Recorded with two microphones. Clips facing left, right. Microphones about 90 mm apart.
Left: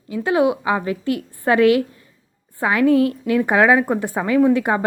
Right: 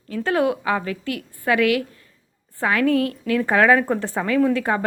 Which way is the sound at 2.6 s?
20° left (ahead or behind).